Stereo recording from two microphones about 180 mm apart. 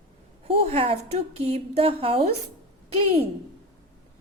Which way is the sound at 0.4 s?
35° right (ahead or behind).